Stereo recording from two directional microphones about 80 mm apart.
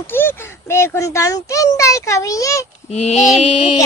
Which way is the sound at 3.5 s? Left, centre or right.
Left.